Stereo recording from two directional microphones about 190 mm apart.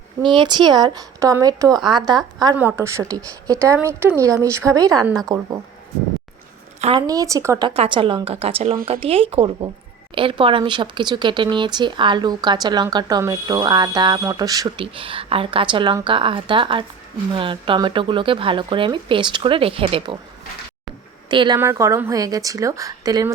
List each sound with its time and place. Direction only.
0.2 s a woman's voice: 25° right (ahead or behind)
6.8 s a woman's voice: 20° right (ahead or behind)
7.7 s speech: 30° right (ahead or behind)
21.2 s a woman's voice: 25° right (ahead or behind)